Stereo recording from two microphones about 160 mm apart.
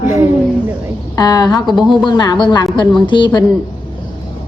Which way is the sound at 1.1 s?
25° left (ahead or behind).